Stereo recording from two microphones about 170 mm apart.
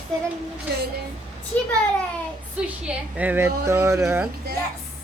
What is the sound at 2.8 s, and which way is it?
A woman's voice, 10° right (ahead or behind).